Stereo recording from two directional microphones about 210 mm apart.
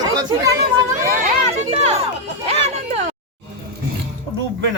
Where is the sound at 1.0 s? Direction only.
40° right (ahead or behind).